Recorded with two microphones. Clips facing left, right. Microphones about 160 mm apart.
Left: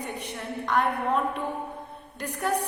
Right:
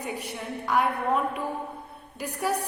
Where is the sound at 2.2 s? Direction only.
10° right (ahead or behind).